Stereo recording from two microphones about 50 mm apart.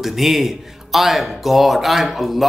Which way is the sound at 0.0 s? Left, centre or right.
Centre.